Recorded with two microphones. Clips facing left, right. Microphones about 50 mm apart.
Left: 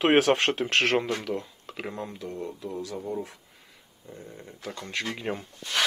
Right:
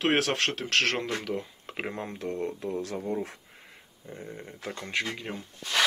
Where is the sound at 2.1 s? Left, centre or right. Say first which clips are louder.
Right 3 dB; right.